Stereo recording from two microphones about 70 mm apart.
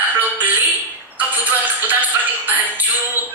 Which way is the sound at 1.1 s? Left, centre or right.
Right.